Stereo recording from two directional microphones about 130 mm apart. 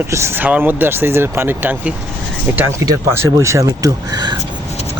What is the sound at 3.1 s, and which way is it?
Speech, 20° right (ahead or behind).